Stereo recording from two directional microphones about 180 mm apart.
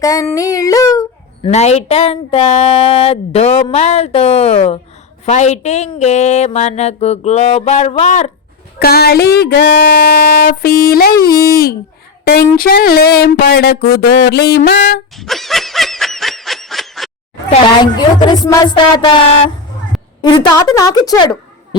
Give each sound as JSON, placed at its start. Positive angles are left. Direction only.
{"t": 0.0, "sound": "speech", "side_deg": 20}
{"t": 1.4, "sound": "speech", "side_deg": 35}
{"t": 8.8, "sound": "speech", "side_deg": 60}
{"t": 11.3, "sound": "speech", "side_deg": 15}
{"t": 12.2, "sound": "speech", "side_deg": 55}
{"t": 15.1, "sound": "snicker", "side_deg": 0}
{"t": 17.9, "sound": "speech", "side_deg": 25}
{"t": 20.2, "sound": "speech", "side_deg": 25}